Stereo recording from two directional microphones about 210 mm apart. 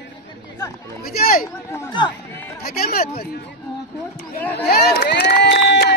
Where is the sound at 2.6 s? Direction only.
45° left (ahead or behind).